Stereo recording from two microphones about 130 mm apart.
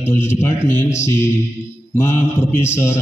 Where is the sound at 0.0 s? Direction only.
20° left (ahead or behind).